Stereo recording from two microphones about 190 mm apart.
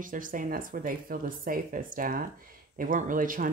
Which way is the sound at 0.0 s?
45° right (ahead or behind).